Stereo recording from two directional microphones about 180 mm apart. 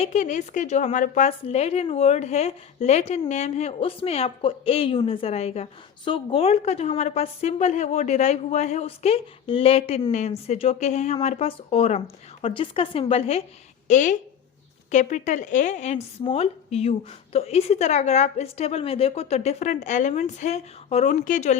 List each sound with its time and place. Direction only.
0.0 s a woman's voice: 40° left (ahead or behind)